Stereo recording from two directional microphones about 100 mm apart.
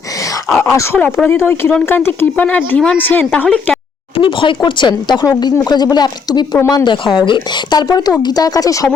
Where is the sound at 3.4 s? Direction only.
5° left (ahead or behind).